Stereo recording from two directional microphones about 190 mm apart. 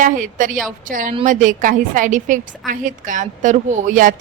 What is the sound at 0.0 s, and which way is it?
A woman's voice, 45° right (ahead or behind).